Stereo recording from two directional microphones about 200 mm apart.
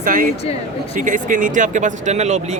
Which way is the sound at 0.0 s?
45° right (ahead or behind).